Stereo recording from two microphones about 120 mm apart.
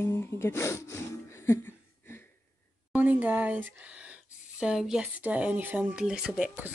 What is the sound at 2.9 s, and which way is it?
Speech, 15° right (ahead or behind).